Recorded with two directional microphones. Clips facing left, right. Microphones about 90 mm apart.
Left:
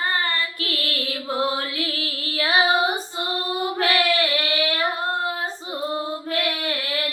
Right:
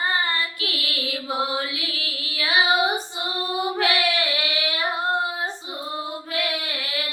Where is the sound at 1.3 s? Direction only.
20° right (ahead or behind).